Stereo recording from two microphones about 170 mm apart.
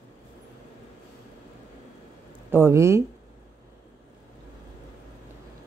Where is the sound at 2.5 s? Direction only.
15° right (ahead or behind).